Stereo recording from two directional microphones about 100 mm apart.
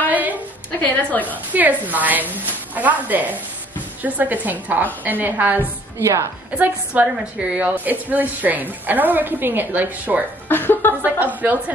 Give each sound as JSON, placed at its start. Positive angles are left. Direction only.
{"t": 0.1, "sound": "a sound", "side_deg": -15}
{"t": 0.7, "sound": "a woman's voice", "side_deg": 15}
{"t": 1.5, "sound": "a woman's voice", "side_deg": -15}
{"t": 5.9, "sound": "a woman's voice", "side_deg": -30}
{"t": 6.6, "sound": "a woman's voice", "side_deg": -15}
{"t": 10.5, "sound": "a sound", "side_deg": 20}
{"t": 11.1, "sound": "a woman's voice", "side_deg": -15}